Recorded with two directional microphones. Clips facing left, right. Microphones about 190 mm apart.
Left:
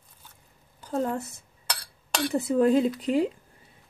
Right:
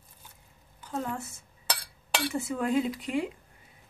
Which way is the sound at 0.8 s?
40° left (ahead or behind).